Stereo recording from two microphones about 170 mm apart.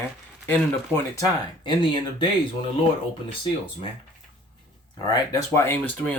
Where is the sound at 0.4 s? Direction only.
10° left (ahead or behind).